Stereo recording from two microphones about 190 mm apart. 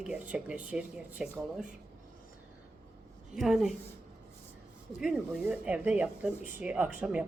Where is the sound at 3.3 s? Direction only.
Centre (ahead or behind).